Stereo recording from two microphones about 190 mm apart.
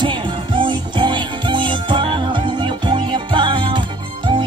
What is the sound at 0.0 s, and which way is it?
Music, 25° right (ahead or behind).